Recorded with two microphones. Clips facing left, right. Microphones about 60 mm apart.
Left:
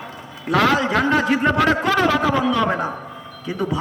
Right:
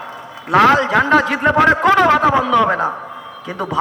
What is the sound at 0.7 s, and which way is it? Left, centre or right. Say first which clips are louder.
A man's voice: right 5 dB; right.